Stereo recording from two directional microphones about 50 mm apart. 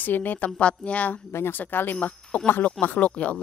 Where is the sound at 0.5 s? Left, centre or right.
Left.